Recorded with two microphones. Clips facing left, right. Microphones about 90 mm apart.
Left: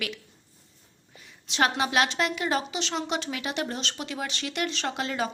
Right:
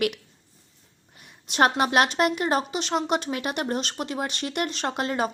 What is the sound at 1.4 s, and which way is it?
Speech, 50° right (ahead or behind).